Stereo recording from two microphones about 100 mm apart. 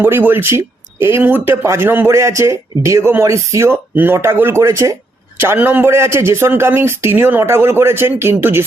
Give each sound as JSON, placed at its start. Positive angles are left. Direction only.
{"t": 0.0, "sound": "a man's voice", "side_deg": -20}
{"t": 5.4, "sound": "a man's voice", "side_deg": -20}